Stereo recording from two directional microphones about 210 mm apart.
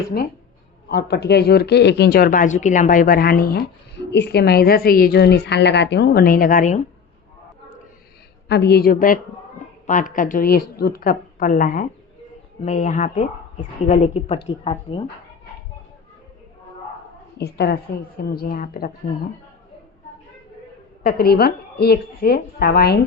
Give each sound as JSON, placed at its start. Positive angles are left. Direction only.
{"t": 0.9, "sound": "speech", "side_deg": 50}
{"t": 8.4, "sound": "a woman's voice", "side_deg": 50}
{"t": 17.3, "sound": "speech", "side_deg": 50}
{"t": 21.0, "sound": "speech", "side_deg": 45}